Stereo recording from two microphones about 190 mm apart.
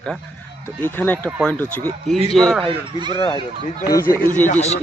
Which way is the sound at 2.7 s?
25° right (ahead or behind).